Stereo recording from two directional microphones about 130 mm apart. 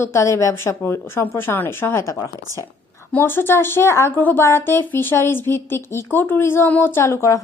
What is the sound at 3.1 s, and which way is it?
Speech, 15° left (ahead or behind).